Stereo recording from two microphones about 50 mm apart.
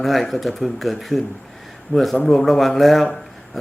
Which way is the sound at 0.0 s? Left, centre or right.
Centre.